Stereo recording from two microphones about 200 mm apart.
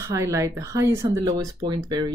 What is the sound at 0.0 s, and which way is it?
Speech, 15° right (ahead or behind).